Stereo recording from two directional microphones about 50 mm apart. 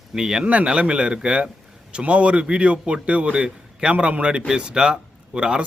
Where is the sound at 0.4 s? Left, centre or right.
Right.